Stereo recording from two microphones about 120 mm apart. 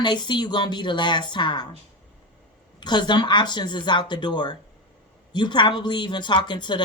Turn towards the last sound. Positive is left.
turn(degrees=40)  # may be behind; listen again after turning